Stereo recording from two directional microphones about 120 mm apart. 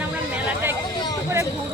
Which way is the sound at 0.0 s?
15° right (ahead or behind).